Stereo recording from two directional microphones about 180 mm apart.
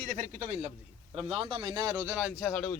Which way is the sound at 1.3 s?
30° right (ahead or behind).